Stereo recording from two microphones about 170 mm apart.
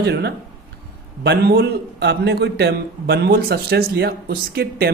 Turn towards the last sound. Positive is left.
turn(degrees=-65)  # may be behind; listen again after turning